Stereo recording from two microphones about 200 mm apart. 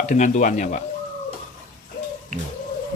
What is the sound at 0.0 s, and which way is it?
Speech, 40° left (ahead or behind).